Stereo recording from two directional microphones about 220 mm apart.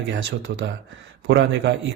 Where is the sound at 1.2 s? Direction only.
50° right (ahead or behind).